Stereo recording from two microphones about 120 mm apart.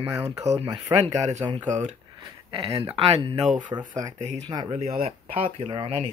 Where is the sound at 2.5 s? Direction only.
50° right (ahead or behind).